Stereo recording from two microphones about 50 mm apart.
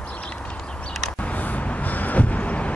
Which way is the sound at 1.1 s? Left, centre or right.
Left.